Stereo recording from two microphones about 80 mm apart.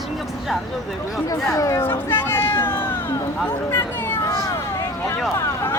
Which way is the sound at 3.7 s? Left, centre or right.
Left.